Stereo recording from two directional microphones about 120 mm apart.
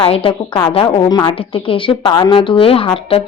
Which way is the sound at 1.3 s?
50° left (ahead or behind).